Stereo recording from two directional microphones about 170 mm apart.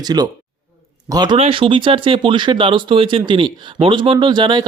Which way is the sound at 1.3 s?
35° right (ahead or behind).